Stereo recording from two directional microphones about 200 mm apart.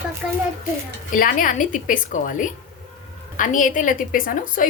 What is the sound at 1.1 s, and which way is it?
A woman's voice, 45° left (ahead or behind).